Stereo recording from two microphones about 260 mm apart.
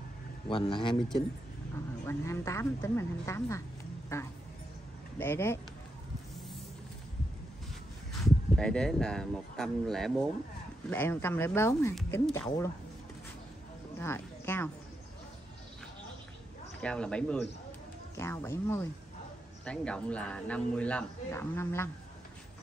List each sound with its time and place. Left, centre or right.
0.5 s speech: centre
2.0 s speech: centre
8.1 s speech: centre
13.9 s speech: centre
16.8 s speech: centre